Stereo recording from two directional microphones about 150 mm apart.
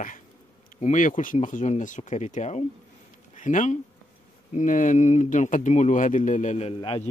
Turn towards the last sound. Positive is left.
turn(degrees=40)  # may be behind; listen again after turning